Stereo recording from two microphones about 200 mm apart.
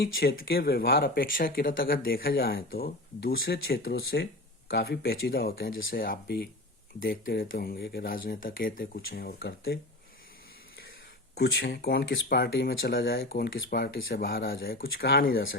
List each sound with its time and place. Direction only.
0.0 s speech: 50° left (ahead or behind)
11.3 s speech: 50° left (ahead or behind)